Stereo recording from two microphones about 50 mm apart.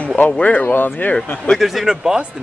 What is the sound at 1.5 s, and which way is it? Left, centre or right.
Speech, centre.